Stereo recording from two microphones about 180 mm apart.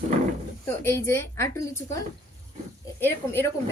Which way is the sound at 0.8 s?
15° left (ahead or behind).